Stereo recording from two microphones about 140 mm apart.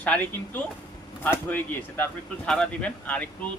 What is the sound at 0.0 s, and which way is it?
Speech, 10° left (ahead or behind).